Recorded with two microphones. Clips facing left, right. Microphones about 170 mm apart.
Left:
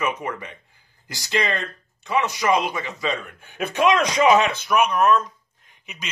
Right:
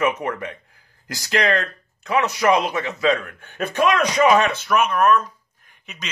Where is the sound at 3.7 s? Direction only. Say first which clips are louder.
Even; 25° left (ahead or behind).